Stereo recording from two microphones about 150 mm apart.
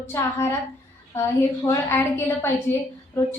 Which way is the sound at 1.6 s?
20° left (ahead or behind).